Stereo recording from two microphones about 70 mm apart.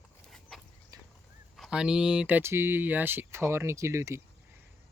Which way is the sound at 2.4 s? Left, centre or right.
Right.